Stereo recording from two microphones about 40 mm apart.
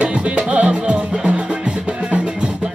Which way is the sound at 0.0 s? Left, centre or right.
Right.